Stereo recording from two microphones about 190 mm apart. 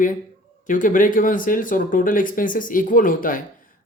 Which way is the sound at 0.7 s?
45° left (ahead or behind).